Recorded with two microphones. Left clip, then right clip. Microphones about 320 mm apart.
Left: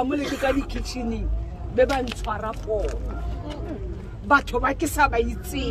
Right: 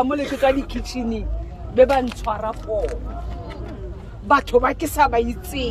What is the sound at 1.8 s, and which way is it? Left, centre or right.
Speech, centre.